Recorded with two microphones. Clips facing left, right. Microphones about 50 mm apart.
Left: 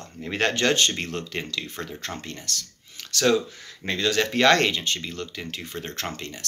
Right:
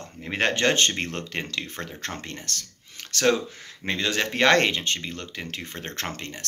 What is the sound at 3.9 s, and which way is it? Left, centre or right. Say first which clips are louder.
Speech: left 2 dB; right.